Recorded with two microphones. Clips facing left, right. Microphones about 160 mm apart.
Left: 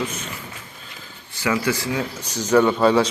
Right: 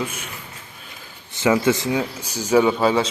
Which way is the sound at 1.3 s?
20° right (ahead or behind).